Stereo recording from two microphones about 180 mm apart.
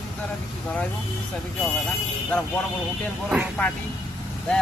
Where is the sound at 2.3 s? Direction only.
5° left (ahead or behind).